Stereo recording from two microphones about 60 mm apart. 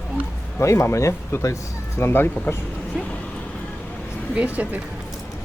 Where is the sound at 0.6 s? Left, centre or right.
Left.